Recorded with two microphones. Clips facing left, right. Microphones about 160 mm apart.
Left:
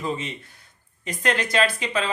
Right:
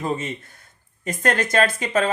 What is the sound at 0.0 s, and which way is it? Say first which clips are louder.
Speech: right 3 dB; 45° right (ahead or behind).